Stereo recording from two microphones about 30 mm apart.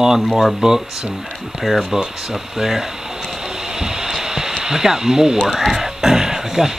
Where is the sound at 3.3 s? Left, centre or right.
Right.